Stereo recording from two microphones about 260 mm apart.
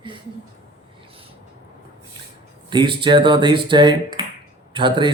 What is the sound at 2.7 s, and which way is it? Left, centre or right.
Speech, centre.